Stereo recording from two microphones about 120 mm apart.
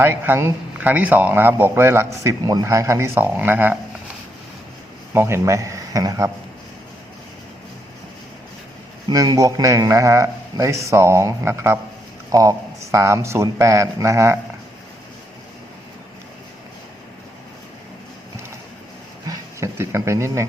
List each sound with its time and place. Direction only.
0.0 s a man's voice: 20° right (ahead or behind)
2.4 s speech: 35° right (ahead or behind); by 3.8 s 15° right (ahead or behind)
5.1 s speech: 20° right (ahead or behind)
9.0 s speech: 30° right (ahead or behind)
19.3 s speech: 25° right (ahead or behind)